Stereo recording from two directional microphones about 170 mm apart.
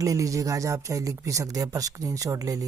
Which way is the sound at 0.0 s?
20° right (ahead or behind).